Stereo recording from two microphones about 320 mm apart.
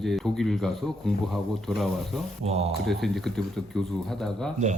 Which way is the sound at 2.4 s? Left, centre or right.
Centre.